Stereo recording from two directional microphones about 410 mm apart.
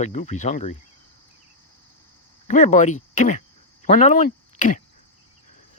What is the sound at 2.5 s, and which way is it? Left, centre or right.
Speech, centre.